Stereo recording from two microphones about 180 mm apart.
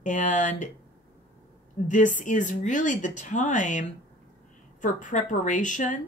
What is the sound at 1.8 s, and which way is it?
Speech, 45° left (ahead or behind).